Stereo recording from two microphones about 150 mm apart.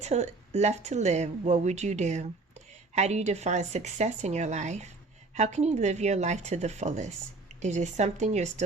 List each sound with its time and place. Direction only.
0.0 s a woman's voice: 45° right (ahead or behind)